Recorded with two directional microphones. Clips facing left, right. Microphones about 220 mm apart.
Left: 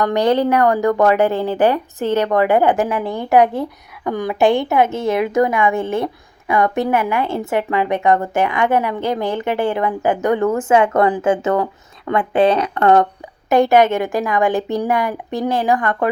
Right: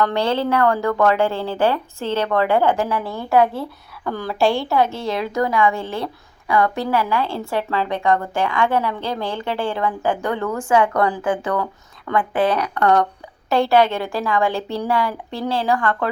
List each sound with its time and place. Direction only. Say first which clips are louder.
0.0 s a woman's voice: left 4 dB; 15° left (ahead or behind)